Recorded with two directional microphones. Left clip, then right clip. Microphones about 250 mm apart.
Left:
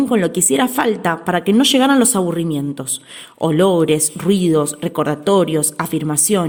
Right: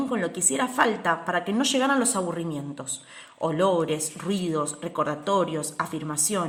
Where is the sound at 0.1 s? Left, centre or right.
Left.